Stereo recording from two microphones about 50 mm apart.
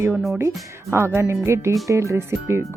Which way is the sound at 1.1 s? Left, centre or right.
Right.